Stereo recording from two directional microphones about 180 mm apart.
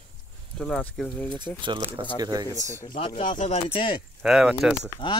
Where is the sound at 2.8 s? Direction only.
30° left (ahead or behind).